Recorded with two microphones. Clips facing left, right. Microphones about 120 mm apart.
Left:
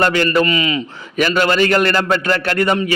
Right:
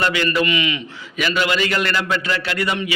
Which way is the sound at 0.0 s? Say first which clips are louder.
Left 5 dB; 45° left (ahead or behind).